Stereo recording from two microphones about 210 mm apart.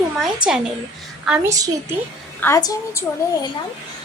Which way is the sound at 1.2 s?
5° right (ahead or behind).